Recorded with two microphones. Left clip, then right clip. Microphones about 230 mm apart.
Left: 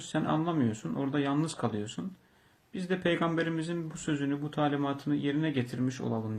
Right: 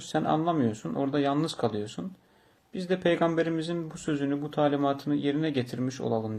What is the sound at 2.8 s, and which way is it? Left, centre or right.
Speech, centre.